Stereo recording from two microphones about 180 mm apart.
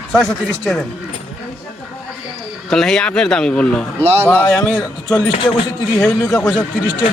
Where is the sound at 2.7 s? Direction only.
Centre (ahead or behind).